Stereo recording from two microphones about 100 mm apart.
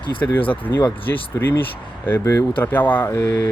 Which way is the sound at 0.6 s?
20° left (ahead or behind).